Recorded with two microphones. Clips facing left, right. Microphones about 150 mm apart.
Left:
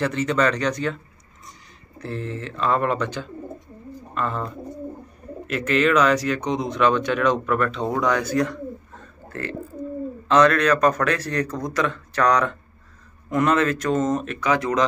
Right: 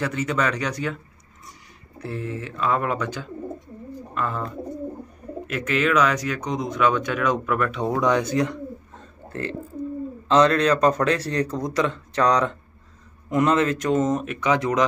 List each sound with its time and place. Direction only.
0.0 s speech: 10° right (ahead or behind)
2.0 s speech: 10° right (ahead or behind)
5.6 s a man's voice: 5° right (ahead or behind)